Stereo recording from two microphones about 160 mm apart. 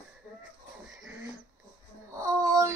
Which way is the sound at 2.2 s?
20° right (ahead or behind).